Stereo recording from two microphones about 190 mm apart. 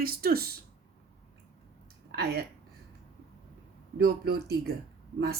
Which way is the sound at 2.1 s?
55° right (ahead or behind).